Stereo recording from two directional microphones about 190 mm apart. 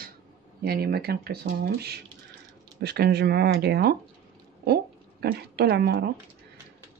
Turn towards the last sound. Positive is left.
turn(degrees=-55)  # may be behind; listen again after turning